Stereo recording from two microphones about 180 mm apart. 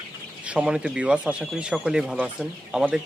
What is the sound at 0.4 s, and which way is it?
Speech, 5° right (ahead or behind).